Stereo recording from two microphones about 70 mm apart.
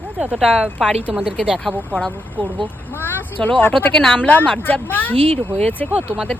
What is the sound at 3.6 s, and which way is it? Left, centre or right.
Speech, left.